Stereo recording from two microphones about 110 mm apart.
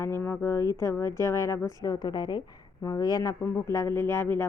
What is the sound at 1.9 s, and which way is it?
Speech, 40° left (ahead or behind).